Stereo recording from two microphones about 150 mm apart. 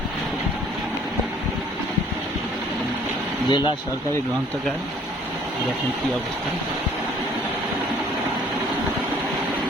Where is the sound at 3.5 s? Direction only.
30° left (ahead or behind).